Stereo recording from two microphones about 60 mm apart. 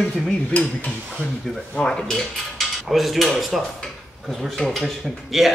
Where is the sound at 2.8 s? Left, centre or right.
Centre.